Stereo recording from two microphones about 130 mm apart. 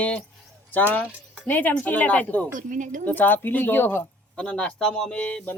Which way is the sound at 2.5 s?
85° right.